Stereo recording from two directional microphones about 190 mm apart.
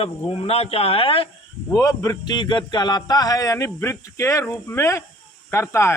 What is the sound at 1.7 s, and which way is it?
A man's voice, 15° left (ahead or behind).